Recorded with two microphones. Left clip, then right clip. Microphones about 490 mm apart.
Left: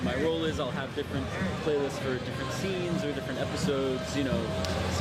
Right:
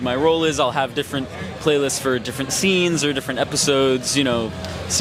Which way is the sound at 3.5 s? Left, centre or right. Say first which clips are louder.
Right 13 dB; right.